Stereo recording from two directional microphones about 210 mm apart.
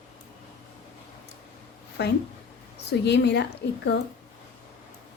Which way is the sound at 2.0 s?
50° left (ahead or behind).